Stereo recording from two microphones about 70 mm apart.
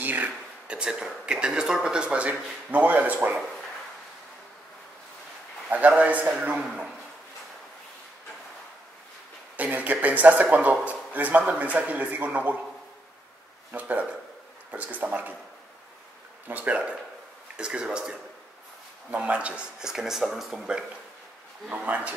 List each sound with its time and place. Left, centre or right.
0.0 s speech: right
5.7 s speech: right
9.6 s speech: right
13.7 s speech: right
16.4 s speech: right
21.6 s speech: right